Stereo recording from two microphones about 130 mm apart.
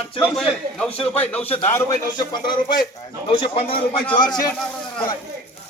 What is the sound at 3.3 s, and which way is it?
Speech, 45° left (ahead or behind).